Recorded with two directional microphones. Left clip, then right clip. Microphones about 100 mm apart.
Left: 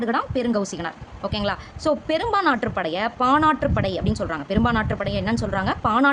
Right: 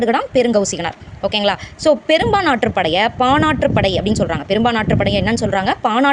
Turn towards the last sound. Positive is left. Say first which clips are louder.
# right 5 dB
turn(degrees=-30)  # may be behind; listen again after turning